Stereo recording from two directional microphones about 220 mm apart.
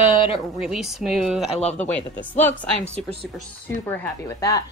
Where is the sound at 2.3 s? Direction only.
10° left (ahead or behind).